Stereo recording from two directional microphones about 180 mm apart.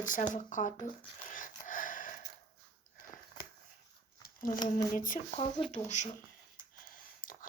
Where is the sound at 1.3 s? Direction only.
50° left (ahead or behind).